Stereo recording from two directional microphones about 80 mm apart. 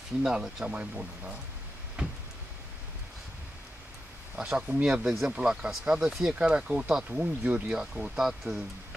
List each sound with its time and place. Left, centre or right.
0.2 s speech: centre
2.0 s a sound: centre
4.4 s speech: centre